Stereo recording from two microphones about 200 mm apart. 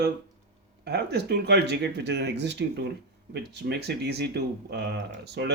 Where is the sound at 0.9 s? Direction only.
55° right (ahead or behind).